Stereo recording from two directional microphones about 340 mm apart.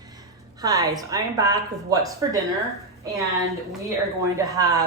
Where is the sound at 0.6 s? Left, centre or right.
Centre.